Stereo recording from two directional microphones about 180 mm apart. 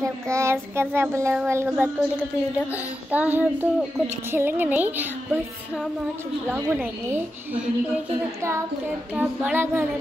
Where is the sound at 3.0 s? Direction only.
10° right (ahead or behind).